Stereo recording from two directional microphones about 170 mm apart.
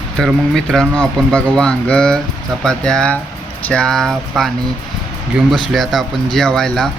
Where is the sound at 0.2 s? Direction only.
Centre (ahead or behind).